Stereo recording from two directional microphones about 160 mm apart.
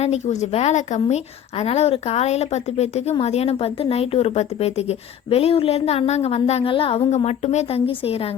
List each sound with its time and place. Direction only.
0.0 s a woman's voice: 45° left (ahead or behind)